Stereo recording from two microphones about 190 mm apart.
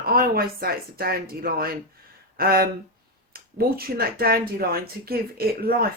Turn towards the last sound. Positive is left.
turn(degrees=-50)  # may be behind; listen again after turning